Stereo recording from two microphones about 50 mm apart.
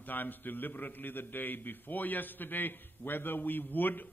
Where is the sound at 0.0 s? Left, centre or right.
Left.